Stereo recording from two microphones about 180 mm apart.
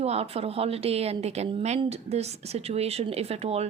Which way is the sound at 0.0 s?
35° right (ahead or behind).